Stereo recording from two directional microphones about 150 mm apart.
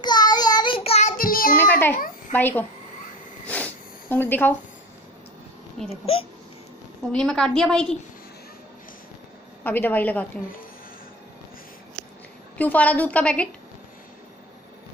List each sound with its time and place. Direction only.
0.0 s child singing: 30° left (ahead or behind); by 1.1 s 45° left (ahead or behind)
1.1 s child singing: 70° left (ahead or behind)
1.6 s babbling: 15° left (ahead or behind)
2.3 s a woman's voice: 10° left (ahead or behind)
3.4 s sniff: 10° left (ahead or behind)
5.9 s speech: 40° left (ahead or behind)
7.1 s a woman's voice: 5° left (ahead or behind)
9.6 s a woman's voice: 10° left (ahead or behind)
12.5 s a woman's voice: 10° left (ahead or behind)